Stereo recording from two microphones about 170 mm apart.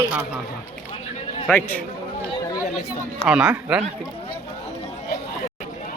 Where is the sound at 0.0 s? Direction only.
10° right (ahead or behind).